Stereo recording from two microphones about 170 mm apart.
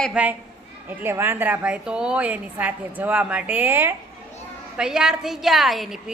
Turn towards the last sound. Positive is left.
turn(degrees=0)  # may be behind; listen again after turning